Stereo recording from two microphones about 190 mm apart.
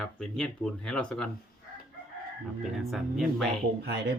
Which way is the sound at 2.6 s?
Centre (ahead or behind).